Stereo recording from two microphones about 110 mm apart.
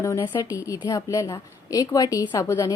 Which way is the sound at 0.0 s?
25° left (ahead or behind).